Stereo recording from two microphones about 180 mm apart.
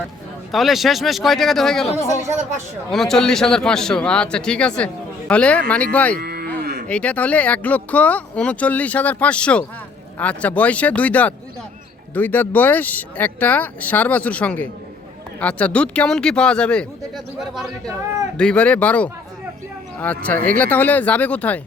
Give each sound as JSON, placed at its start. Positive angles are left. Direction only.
{"t": 0.5, "sound": "speech", "side_deg": 0}
{"t": 6.1, "sound": "cattle", "side_deg": -60}
{"t": 6.8, "sound": "speech", "side_deg": 5}